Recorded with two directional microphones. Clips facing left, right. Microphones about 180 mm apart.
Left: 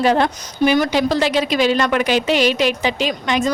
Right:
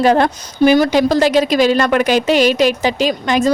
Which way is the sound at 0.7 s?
35° right (ahead or behind).